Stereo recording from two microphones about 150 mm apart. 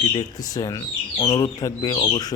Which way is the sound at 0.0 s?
30° left (ahead or behind).